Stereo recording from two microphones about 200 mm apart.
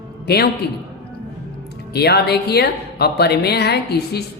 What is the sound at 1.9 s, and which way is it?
A woman's voice, 55° left (ahead or behind).